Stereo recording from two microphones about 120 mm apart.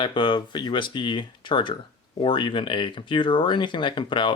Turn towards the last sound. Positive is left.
turn(degrees=40)  # may be behind; listen again after turning